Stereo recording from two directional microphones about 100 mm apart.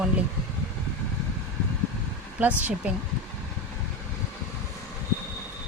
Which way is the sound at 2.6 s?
15° right (ahead or behind).